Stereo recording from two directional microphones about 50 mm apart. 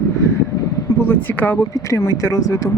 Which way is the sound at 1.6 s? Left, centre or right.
Left.